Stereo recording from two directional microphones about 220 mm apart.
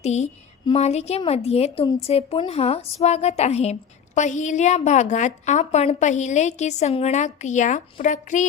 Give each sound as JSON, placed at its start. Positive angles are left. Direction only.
{"t": 0.0, "sound": "a woman's voice", "side_deg": 30}